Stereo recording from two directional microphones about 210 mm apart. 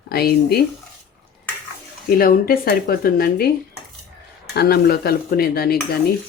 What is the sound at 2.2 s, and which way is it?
Speech, 45° left (ahead or behind).